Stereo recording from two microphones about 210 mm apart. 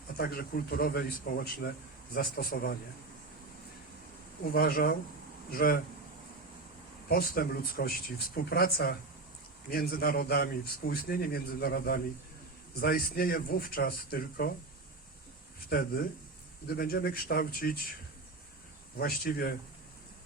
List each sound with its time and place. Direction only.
0.2 s a man's voice: 45° left (ahead or behind)
4.5 s a man's voice: 45° left (ahead or behind)
7.1 s a man's voice: 45° left (ahead or behind)
15.7 s a man's voice: 45° left (ahead or behind)
18.9 s a man's voice: 45° left (ahead or behind)